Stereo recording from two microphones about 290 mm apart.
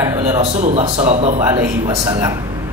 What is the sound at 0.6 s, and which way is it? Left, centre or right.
Speech, right.